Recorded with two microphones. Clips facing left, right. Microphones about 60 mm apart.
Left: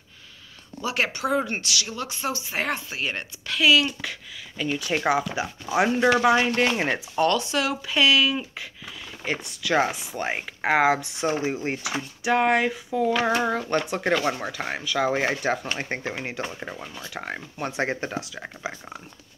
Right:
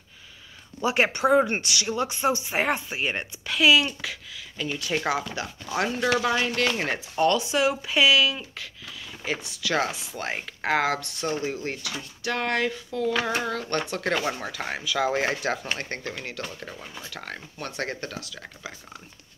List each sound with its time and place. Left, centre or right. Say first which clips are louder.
0.7 s speech: right 3 dB; right; by 6.9 s left
6.9 s speech: left 1 dB; centre
8.4 s a sound: left 5 dB; centre
9.2 s speech: left 1 dB; centre
13.7 s speech: left 2 dB; centre